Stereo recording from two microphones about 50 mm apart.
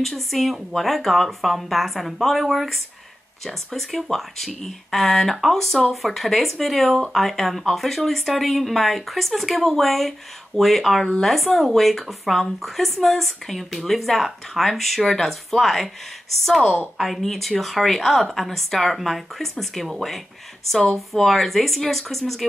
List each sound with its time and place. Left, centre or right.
0.0 s speech: centre